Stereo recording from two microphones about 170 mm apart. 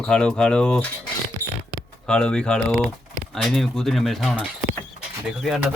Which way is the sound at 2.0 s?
5° left (ahead or behind).